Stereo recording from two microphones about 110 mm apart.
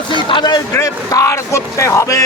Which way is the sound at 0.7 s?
30° left (ahead or behind).